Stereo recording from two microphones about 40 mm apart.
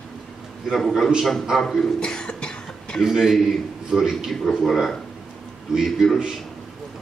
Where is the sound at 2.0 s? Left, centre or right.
Centre.